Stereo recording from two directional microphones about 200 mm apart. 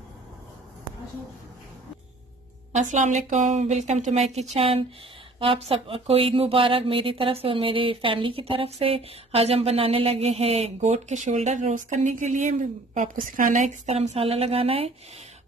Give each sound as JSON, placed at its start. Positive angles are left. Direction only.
{"t": 2.7, "sound": "a woman's voice", "side_deg": -35}